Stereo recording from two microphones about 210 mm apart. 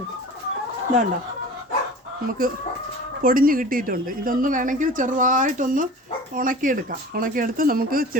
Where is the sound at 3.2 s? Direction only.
40° right (ahead or behind).